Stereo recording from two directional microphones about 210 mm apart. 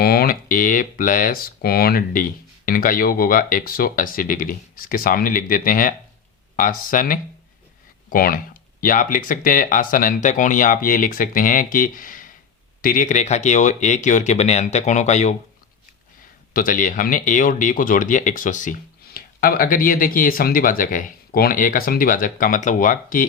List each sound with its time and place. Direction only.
0.0 s speech: 45° left (ahead or behind)
16.5 s speech: 40° left (ahead or behind)